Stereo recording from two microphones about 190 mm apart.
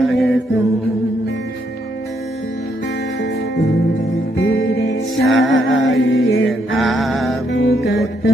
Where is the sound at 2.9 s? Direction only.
65° left (ahead or behind).